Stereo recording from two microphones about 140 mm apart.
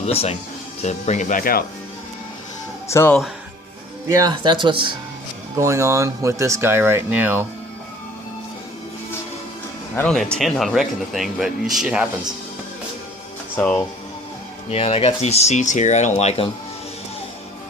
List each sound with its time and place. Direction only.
0.0 s speech: 45° left (ahead or behind); by 1.6 s 90° left
2.9 s speech: 15° left (ahead or behind)
4.1 s speech: 30° right (ahead or behind)
5.5 s speech: 20° right (ahead or behind)
9.9 s speech: 10° left (ahead or behind); by 12.0 s 5° right (ahead or behind)
13.6 s speech: 15° left (ahead or behind)
14.7 s speech: 45° left (ahead or behind)